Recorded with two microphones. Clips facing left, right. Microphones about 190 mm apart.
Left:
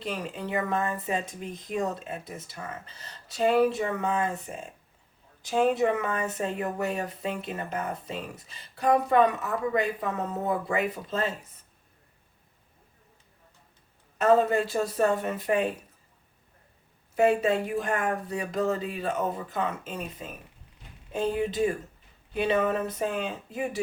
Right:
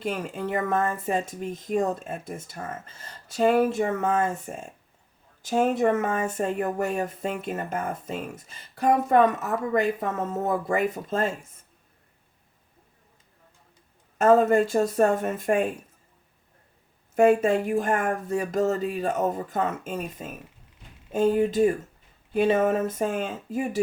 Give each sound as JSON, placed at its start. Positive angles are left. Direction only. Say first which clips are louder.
{"t": 0.0, "sound": "speech", "louder": "right 4 dB", "side_deg": -50}
{"t": 14.2, "sound": "speech", "louder": "right 4 dB", "side_deg": -45}
{"t": 17.2, "sound": "speech", "louder": "right 4 dB", "side_deg": -50}